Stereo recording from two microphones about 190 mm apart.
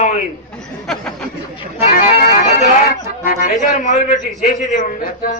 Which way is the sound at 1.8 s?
40° left (ahead or behind).